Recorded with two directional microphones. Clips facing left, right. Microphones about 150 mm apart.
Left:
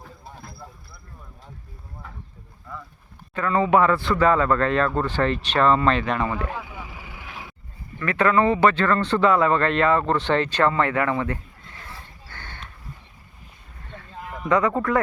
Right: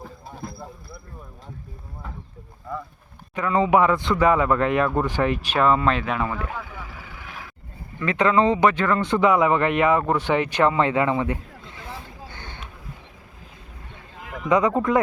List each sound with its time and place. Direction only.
3.3 s a man's voice: 15° right (ahead or behind)
6.5 s vehicle: 10° left (ahead or behind)
7.9 s a man's voice: 15° right (ahead or behind)
12.3 s a sound: 15° right (ahead or behind)
14.3 s a sound: 90° right
14.5 s a man's voice: 15° right (ahead or behind)